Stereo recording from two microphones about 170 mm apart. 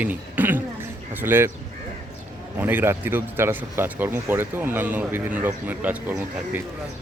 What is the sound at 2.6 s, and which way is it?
Speech, 10° right (ahead or behind).